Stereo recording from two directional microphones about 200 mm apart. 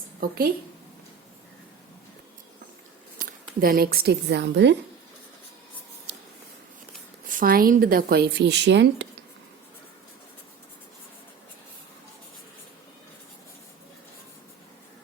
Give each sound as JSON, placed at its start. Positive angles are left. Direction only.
{"t": 0.2, "sound": "speech", "side_deg": -45}
{"t": 3.2, "sound": "speech", "side_deg": -45}
{"t": 7.3, "sound": "speech", "side_deg": -45}